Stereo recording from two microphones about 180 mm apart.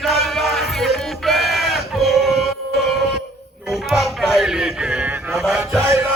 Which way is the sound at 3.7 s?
Centre (ahead or behind).